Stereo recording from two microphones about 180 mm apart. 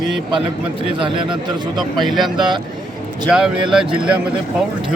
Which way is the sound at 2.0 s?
Centre (ahead or behind).